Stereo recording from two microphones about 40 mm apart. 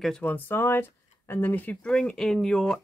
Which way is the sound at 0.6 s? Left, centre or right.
Left.